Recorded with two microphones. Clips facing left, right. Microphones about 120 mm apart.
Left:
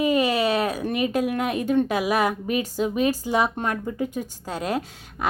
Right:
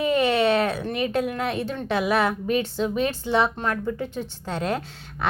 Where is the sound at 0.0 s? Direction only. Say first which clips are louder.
Even; 10° left (ahead or behind).